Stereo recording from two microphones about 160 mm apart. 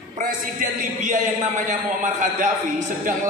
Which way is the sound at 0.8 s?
50° right (ahead or behind).